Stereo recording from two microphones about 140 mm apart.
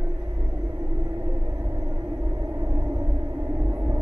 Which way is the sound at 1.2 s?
15° right (ahead or behind).